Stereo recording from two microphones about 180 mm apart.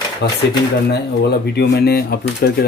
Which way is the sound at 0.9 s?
65° left (ahead or behind).